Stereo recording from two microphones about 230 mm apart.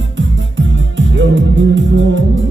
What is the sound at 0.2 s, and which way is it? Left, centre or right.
Music, right.